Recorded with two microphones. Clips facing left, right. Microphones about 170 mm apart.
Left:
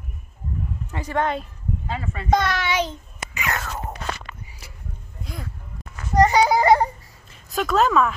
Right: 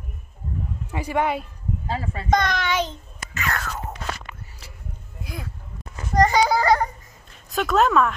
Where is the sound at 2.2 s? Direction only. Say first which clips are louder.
Left 1 dB; 5° left (ahead or behind).